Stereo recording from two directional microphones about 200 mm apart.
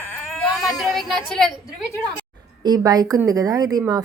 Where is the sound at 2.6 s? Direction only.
20° right (ahead or behind).